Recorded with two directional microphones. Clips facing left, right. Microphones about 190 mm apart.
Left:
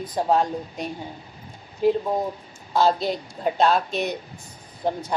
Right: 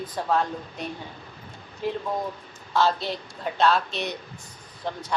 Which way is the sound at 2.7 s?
40° left (ahead or behind).